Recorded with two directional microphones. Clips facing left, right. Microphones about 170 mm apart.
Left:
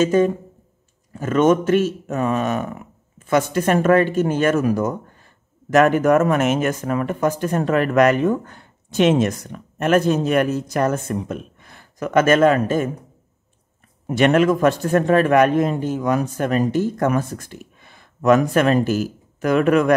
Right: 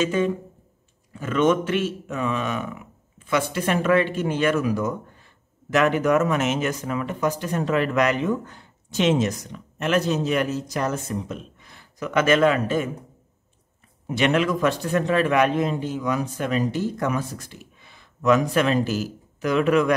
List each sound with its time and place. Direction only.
0.0 s a man's voice: 45° left (ahead or behind)
14.0 s a man's voice: 50° left (ahead or behind)